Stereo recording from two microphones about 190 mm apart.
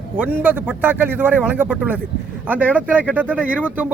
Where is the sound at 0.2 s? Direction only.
10° right (ahead or behind).